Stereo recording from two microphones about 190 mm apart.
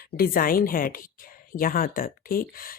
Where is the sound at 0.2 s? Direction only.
50° left (ahead or behind).